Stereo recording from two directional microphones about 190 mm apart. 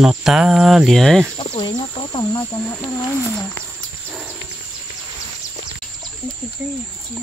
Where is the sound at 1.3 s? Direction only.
25° left (ahead or behind).